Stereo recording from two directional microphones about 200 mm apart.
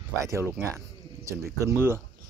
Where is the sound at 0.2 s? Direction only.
15° right (ahead or behind).